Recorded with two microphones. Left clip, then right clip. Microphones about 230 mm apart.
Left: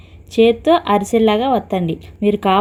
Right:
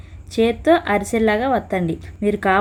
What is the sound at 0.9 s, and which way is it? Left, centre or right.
Speech, centre.